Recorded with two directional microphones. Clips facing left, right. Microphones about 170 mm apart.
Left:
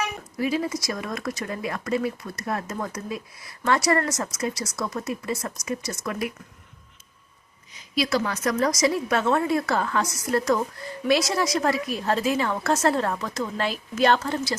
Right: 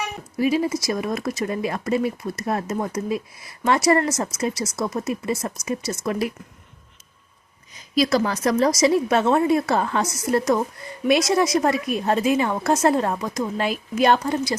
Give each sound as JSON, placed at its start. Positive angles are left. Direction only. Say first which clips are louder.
{"t": 0.3, "sound": "speech", "louder": "right 5 dB", "side_deg": -25}
{"t": 7.9, "sound": "a woman's voice", "louder": "right 5 dB", "side_deg": -40}